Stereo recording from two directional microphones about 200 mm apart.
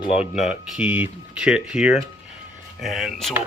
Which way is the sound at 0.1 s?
5° right (ahead or behind).